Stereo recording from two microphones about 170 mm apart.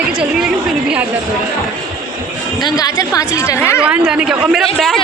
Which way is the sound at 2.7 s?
20° left (ahead or behind).